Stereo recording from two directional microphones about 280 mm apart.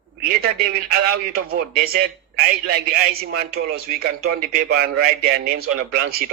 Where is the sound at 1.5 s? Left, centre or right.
Right.